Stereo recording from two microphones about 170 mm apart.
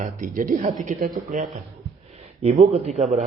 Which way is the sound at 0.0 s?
50° right (ahead or behind).